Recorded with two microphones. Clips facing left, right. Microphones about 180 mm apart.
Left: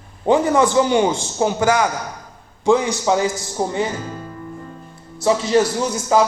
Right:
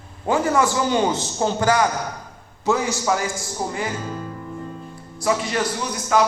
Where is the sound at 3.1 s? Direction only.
25° left (ahead or behind).